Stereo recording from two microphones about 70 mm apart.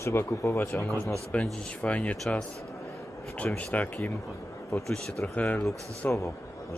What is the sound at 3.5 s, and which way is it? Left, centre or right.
Speech, left.